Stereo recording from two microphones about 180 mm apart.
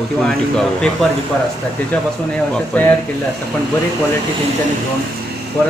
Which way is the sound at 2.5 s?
10° left (ahead or behind).